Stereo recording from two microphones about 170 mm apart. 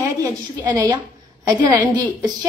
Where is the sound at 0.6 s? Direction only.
25° right (ahead or behind).